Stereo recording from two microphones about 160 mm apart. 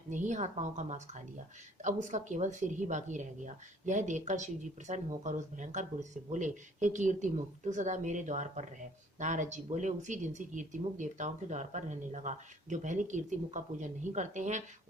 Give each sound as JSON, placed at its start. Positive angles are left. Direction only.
{"t": 0.1, "sound": "speech", "side_deg": -50}